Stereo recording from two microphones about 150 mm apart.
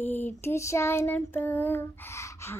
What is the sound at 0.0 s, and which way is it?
Child singing, 15° left (ahead or behind).